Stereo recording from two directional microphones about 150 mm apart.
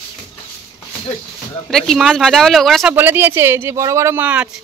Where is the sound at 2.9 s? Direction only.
15° right (ahead or behind).